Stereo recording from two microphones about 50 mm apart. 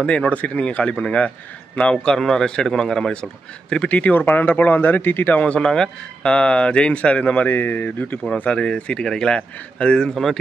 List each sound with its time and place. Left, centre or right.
0.0 s speech: left
4.0 s speech: left
5.6 s speech: centre
7.4 s speech: left
8.5 s speech: left